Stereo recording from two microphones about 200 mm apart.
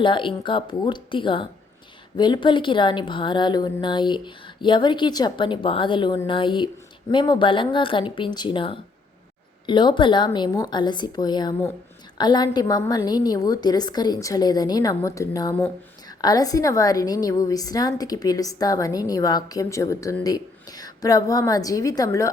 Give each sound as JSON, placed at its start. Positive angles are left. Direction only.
{"t": 0.0, "sound": "a woman's voice", "side_deg": 25}